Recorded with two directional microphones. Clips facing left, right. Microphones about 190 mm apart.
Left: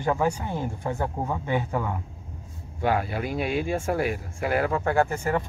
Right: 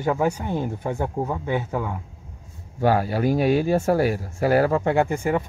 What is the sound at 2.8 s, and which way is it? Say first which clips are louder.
Speech: right 5 dB; 40° right (ahead or behind).